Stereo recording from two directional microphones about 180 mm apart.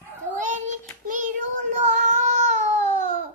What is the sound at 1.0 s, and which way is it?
Child singing, 45° right (ahead or behind).